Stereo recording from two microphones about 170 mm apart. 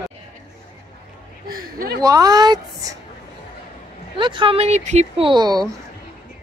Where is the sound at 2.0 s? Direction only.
20° right (ahead or behind).